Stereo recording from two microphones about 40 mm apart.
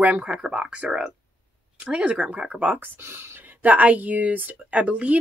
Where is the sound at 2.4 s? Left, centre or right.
Right.